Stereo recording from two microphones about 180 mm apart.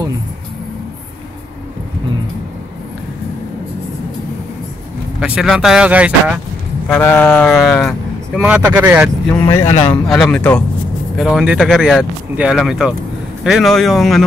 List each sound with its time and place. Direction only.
5.2 s speech: 5° right (ahead or behind)
6.9 s speech: 10° left (ahead or behind)
7.5 s speech: centre (ahead or behind)
9.3 s speech: 15° left (ahead or behind)
10.0 s speech: centre (ahead or behind)